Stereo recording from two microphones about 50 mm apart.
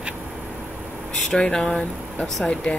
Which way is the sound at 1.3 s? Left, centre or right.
Centre.